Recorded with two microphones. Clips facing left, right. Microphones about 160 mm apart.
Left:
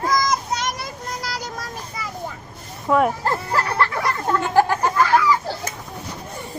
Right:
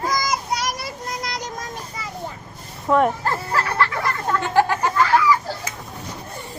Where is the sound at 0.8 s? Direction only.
Centre (ahead or behind).